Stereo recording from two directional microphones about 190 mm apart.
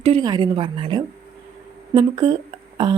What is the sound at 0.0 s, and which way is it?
A woman's voice, 25° right (ahead or behind).